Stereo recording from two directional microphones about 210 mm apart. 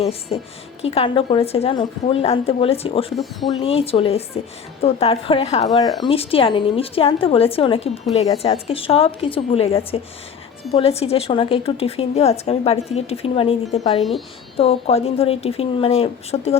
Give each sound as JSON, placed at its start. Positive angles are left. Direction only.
{"t": 0.0, "sound": "speech", "side_deg": 30}
{"t": 5.6, "sound": "speech", "side_deg": 20}